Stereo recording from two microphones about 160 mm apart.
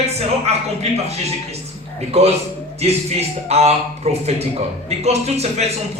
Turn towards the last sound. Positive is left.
turn(degrees=-40)  # may be behind; listen again after turning